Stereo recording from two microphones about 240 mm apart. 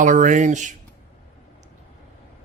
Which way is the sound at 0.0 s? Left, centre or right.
Right.